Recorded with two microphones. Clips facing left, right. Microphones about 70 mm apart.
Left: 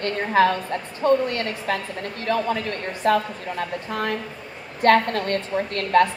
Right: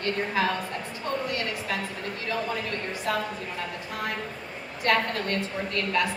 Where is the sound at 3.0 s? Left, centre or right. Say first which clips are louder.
Left 9 dB; left.